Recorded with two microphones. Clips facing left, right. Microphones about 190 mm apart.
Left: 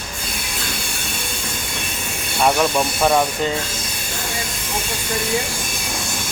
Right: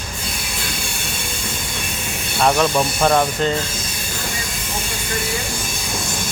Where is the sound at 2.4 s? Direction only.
5° left (ahead or behind).